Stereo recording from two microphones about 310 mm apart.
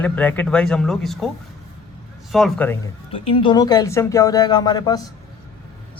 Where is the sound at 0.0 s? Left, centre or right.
Centre.